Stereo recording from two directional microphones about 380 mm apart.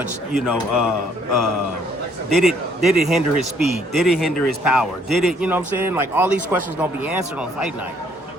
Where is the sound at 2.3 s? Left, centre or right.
Centre.